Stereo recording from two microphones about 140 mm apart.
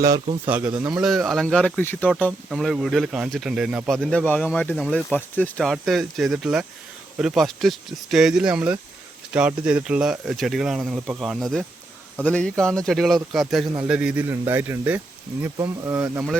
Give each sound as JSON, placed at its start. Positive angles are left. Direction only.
{"t": 0.4, "sound": "speech", "side_deg": -10}
{"t": 1.0, "sound": "speech", "side_deg": 0}
{"t": 2.5, "sound": "speech", "side_deg": 0}
{"t": 5.6, "sound": "speech", "side_deg": 0}